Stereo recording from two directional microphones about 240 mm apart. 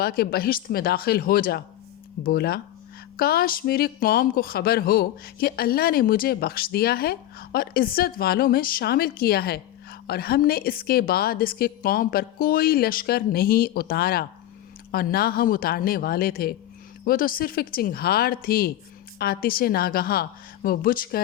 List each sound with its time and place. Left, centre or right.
0.0 s speech: left